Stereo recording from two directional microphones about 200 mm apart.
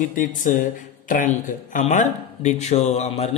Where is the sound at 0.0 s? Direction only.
40° left (ahead or behind).